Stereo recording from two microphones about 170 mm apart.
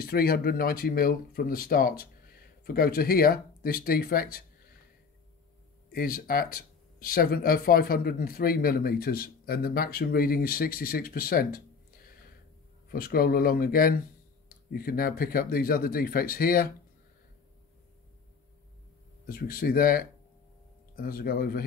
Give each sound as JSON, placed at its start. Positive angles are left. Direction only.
{"t": 0.0, "sound": "speech", "side_deg": 60}
{"t": 5.9, "sound": "speech", "side_deg": 60}
{"t": 12.9, "sound": "speech", "side_deg": 60}
{"t": 19.2, "sound": "speech", "side_deg": 60}